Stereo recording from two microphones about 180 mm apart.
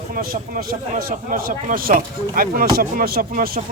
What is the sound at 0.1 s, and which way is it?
Speech, 55° right (ahead or behind).